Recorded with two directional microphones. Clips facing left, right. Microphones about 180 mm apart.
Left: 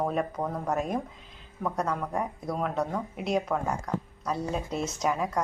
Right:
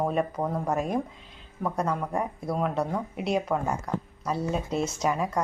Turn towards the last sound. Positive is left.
turn(degrees=0)  # may be behind; listen again after turning